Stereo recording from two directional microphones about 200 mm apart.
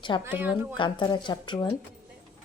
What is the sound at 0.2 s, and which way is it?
Speech, 10° right (ahead or behind).